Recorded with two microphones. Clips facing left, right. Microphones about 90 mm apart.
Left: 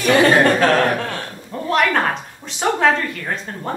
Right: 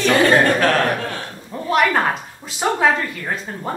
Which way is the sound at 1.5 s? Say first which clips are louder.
Even; 5° right (ahead or behind).